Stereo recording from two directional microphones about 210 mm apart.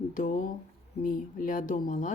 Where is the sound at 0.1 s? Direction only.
40° left (ahead or behind).